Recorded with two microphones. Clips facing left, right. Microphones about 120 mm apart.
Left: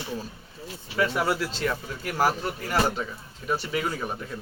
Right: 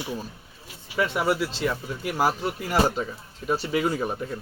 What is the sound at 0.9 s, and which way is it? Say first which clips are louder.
Speech: right 1 dB; 15° right (ahead or behind).